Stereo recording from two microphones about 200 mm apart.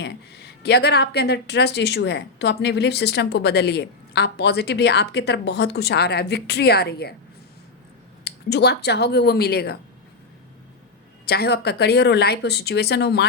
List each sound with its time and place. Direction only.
0.0 s speech: 55° left (ahead or behind)
8.2 s speech: 55° left (ahead or behind)
11.3 s speech: 55° left (ahead or behind)